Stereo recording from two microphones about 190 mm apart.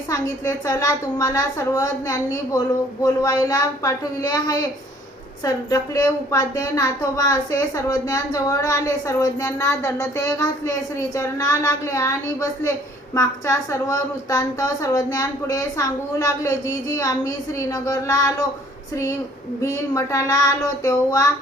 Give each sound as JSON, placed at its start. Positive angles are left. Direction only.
{"t": 0.1, "sound": "a woman's voice", "side_deg": 15}
{"t": 17.7, "sound": "a woman's voice", "side_deg": 20}
{"t": 19.6, "sound": "a woman's voice", "side_deg": 15}